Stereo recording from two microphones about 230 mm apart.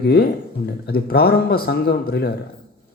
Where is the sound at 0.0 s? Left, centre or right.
Left.